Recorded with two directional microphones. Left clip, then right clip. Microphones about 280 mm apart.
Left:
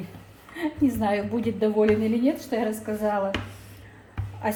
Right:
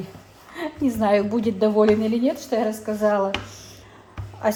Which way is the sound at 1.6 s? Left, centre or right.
Right.